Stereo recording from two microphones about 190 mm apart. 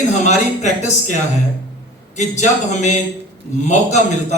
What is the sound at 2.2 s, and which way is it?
A man's voice, 40° left (ahead or behind).